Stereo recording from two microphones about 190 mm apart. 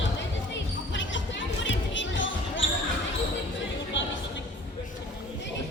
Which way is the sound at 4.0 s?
75° left (ahead or behind).